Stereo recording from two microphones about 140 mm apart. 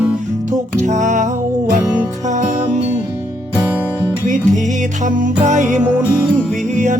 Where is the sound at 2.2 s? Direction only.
60° right (ahead or behind).